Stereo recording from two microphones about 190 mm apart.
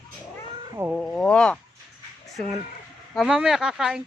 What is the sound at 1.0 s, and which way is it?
Speech, centre (ahead or behind).